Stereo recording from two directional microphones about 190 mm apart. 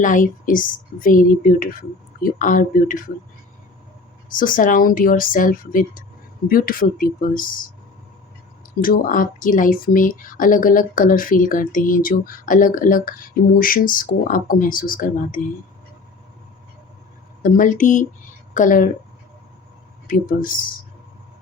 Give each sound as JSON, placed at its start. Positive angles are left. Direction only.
{"t": 0.0, "sound": "speech", "side_deg": 45}
{"t": 4.3, "sound": "speech", "side_deg": 45}
{"t": 8.8, "sound": "speech", "side_deg": 45}
{"t": 17.4, "sound": "speech", "side_deg": 45}
{"t": 20.1, "sound": "speech", "side_deg": 45}